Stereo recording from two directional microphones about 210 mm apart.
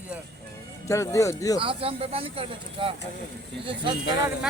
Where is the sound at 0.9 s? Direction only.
15° left (ahead or behind).